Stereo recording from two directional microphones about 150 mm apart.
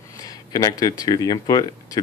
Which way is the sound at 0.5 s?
25° left (ahead or behind).